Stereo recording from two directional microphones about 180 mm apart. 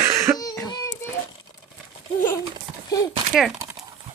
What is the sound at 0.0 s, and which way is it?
Cough, 15° right (ahead or behind).